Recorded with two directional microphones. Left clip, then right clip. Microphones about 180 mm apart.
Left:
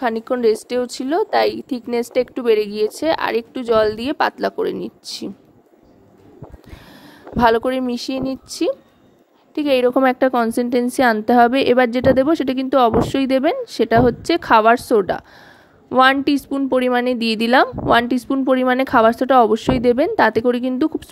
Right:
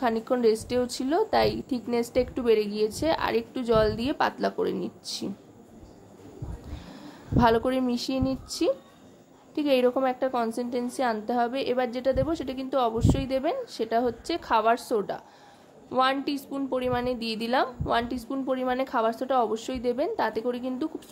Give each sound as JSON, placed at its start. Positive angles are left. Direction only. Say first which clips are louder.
{"t": 0.0, "sound": "a woman's voice", "louder": "left 6 dB", "side_deg": 40}
{"t": 7.3, "sound": "a woman's voice", "louder": "left 7 dB", "side_deg": 45}